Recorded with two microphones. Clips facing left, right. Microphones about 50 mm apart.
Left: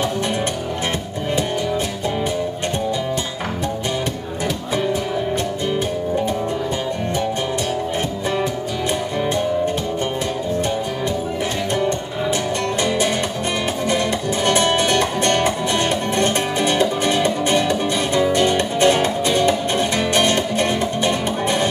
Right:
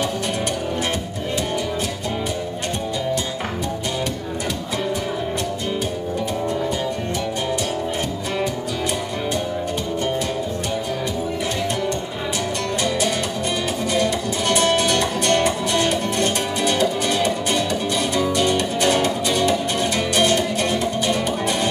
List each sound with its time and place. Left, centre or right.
13.9 s music: left